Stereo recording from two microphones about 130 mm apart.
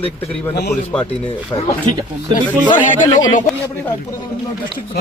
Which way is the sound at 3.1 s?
30° left (ahead or behind).